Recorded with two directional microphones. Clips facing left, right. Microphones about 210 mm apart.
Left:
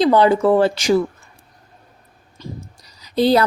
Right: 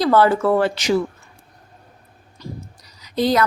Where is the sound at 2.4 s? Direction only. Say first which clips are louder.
Left 1 dB; 25° left (ahead or behind).